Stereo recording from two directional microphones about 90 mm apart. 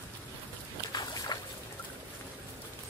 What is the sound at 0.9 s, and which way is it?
Boat, 50° left (ahead or behind).